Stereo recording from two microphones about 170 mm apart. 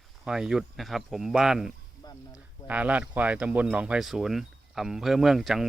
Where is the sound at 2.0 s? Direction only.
25° left (ahead or behind).